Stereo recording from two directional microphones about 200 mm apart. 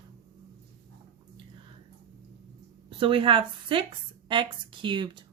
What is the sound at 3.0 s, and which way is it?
Speech, 25° right (ahead or behind).